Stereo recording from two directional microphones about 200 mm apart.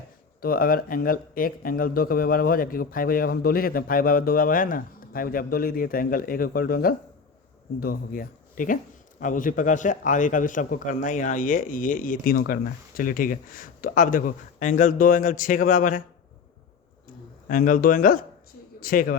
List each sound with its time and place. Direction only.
0.4 s a man's voice: 45° left (ahead or behind)
17.5 s speech: 45° left (ahead or behind)